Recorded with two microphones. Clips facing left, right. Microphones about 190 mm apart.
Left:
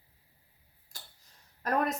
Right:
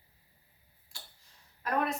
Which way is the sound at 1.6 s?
40° left (ahead or behind).